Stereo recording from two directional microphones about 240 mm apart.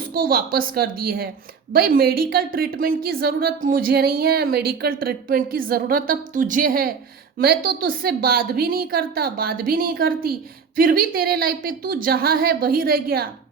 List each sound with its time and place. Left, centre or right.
0.1 s a woman's voice: right